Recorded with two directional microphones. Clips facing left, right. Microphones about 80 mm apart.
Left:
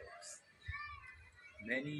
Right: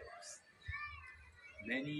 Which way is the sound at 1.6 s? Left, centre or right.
Left.